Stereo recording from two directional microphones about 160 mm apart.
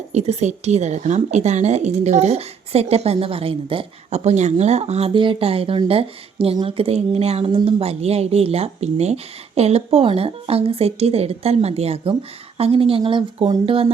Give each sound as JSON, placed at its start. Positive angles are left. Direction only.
{"t": 0.1, "sound": "a woman's voice", "side_deg": -40}